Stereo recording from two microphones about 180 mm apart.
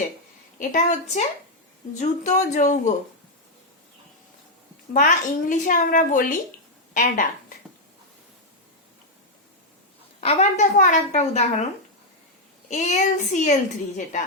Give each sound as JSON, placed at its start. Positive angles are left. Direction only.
{"t": 0.7, "sound": "a woman's voice", "side_deg": 40}
{"t": 4.9, "sound": "speech", "side_deg": 45}
{"t": 10.2, "sound": "a woman's voice", "side_deg": 35}
{"t": 12.7, "sound": "speech", "side_deg": 40}